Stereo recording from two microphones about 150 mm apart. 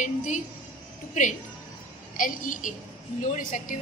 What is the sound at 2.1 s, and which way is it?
Speech, 60° left (ahead or behind).